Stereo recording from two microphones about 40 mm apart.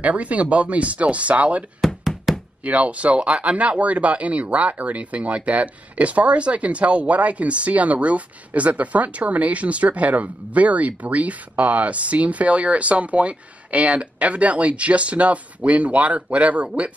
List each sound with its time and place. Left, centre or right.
0.0 s speech: right
1.8 s knock: centre
2.3 s knock: centre
2.6 s speech: right